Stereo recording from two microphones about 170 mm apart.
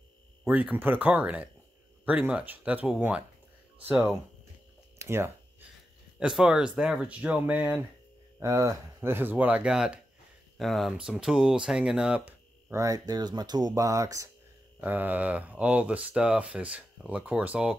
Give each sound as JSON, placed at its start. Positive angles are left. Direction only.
{"t": 0.5, "sound": "speech", "side_deg": -10}
{"t": 4.9, "sound": "a sound", "side_deg": -15}
{"t": 6.1, "sound": "speech", "side_deg": -5}